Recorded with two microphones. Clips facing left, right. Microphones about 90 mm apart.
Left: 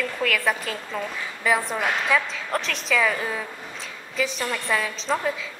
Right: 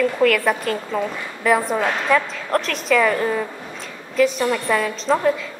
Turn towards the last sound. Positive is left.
turn(degrees=0)  # may be behind; listen again after turning